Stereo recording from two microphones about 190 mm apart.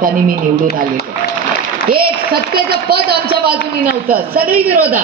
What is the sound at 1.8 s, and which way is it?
A man's voice, 55° right (ahead or behind).